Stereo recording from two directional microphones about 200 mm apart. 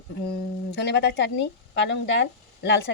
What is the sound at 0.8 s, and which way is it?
Speech, 60° left (ahead or behind).